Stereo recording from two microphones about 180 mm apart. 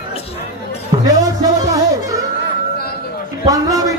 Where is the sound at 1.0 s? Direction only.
20° right (ahead or behind).